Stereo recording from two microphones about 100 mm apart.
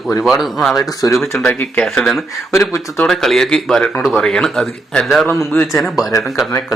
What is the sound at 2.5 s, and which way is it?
Speech, 30° left (ahead or behind).